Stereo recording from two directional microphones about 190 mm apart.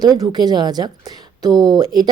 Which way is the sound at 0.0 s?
20° right (ahead or behind).